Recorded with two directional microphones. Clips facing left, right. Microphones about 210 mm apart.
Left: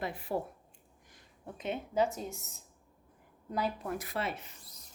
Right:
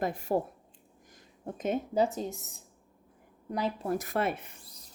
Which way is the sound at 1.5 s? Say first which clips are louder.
Right 6 dB; 45° right (ahead or behind).